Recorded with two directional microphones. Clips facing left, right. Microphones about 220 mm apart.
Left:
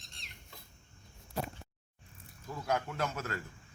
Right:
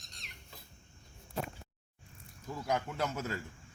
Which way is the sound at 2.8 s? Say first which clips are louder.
Right 1 dB; 10° right (ahead or behind).